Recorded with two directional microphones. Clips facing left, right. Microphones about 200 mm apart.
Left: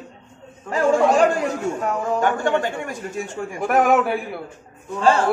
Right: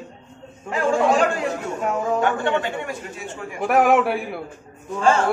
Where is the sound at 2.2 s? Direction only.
45° left (ahead or behind).